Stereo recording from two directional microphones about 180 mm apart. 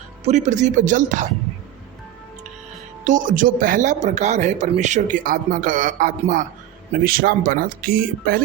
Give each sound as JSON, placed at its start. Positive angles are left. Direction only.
{"t": 0.3, "sound": "speech", "side_deg": -40}
{"t": 3.0, "sound": "speech", "side_deg": -45}